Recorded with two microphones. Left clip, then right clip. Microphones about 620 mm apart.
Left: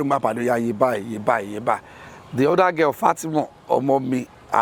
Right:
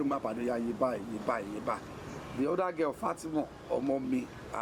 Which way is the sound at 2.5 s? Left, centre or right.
Left.